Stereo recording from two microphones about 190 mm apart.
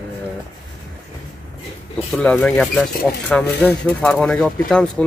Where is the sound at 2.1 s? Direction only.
5° left (ahead or behind).